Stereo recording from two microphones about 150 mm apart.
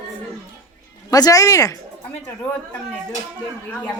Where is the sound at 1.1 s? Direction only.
25° left (ahead or behind).